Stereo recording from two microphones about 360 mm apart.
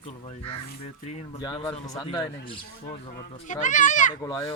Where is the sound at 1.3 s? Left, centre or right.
Centre.